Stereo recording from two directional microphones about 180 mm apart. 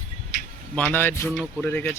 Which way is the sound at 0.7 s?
10° left (ahead or behind).